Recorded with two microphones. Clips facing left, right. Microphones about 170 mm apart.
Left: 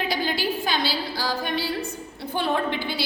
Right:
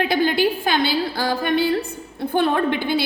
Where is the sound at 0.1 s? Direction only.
55° right (ahead or behind).